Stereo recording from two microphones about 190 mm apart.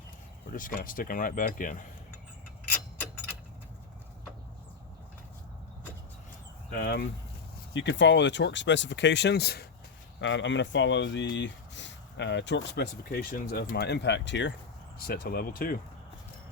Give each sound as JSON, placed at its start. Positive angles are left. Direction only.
{"t": 0.5, "sound": "speech", "side_deg": 45}
{"t": 6.7, "sound": "speech", "side_deg": 55}
{"t": 7.7, "sound": "speech", "side_deg": 70}
{"t": 10.2, "sound": "speech", "side_deg": 75}
{"t": 14.9, "sound": "speech", "side_deg": 55}